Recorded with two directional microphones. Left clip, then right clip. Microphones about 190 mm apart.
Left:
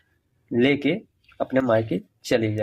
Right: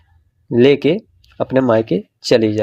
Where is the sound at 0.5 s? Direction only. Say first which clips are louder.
Right 9 dB; 25° right (ahead or behind).